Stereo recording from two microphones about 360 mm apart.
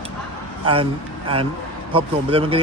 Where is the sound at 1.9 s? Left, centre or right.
Centre.